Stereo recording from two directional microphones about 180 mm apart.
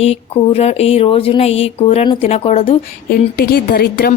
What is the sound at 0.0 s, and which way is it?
Speech, 35° left (ahead or behind).